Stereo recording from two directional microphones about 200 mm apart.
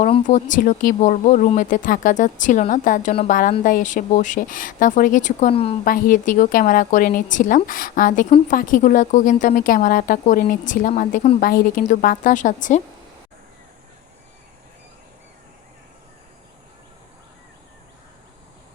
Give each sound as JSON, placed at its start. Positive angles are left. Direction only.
{"t": 0.0, "sound": "a woman's voice", "side_deg": 35}
{"t": 5.8, "sound": "a woman's voice", "side_deg": 40}